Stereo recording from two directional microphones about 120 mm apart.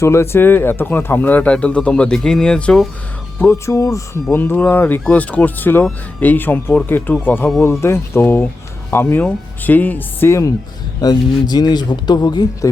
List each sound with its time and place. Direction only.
0.0 s speech: 25° left (ahead or behind); by 2.9 s 5° left (ahead or behind)
3.3 s speech: 25° left (ahead or behind)
11.0 s speech: 35° left (ahead or behind)